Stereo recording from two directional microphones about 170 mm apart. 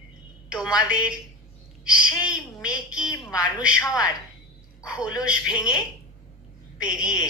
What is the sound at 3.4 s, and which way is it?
Speech, 5° right (ahead or behind).